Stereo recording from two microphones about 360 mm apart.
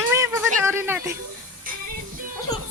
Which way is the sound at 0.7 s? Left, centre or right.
Centre.